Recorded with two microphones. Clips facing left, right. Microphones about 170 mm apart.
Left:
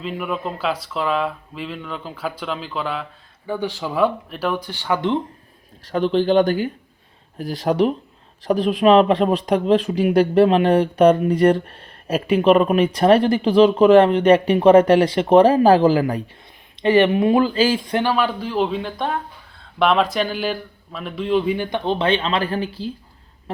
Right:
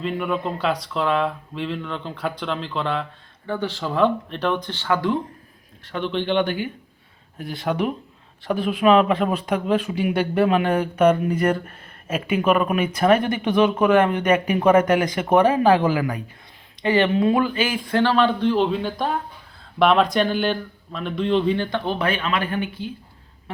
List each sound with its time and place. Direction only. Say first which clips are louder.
0.0 s speech: right 1 dB; centre (ahead or behind); by 5.2 s 20° left (ahead or behind)
5.8 s speech: left 7 dB; 40° left (ahead or behind)
16.8 s speech: left 3 dB; 25° left (ahead or behind)
17.8 s speech: right 1 dB; 15° left (ahead or behind); by 22.9 s 35° left (ahead or behind)